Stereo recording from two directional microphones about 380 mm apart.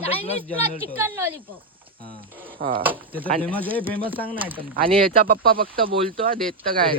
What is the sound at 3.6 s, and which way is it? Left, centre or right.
Speech, centre.